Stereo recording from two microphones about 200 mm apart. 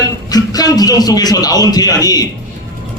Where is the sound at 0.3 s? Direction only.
20° left (ahead or behind).